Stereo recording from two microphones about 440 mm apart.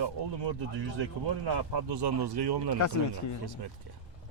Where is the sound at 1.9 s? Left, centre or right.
Right.